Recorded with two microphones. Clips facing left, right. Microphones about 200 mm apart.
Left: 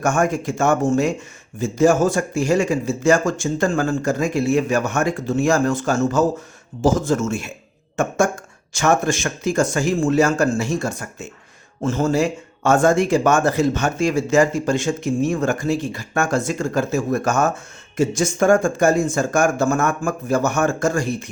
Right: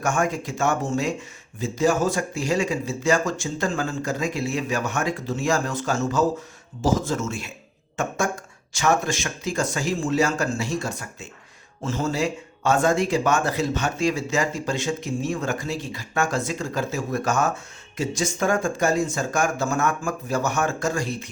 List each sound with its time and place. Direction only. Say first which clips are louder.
0.0 s speech: left 5 dB; 50° left (ahead or behind)